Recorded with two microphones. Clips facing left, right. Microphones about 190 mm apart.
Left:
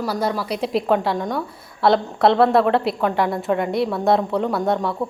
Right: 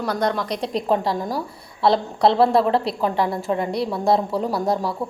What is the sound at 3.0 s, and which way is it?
Speech, 30° right (ahead or behind).